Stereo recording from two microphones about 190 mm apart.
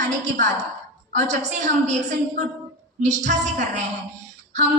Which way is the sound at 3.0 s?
40° right (ahead or behind).